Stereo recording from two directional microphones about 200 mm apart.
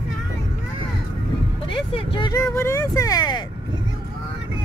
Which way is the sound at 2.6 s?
15° left (ahead or behind).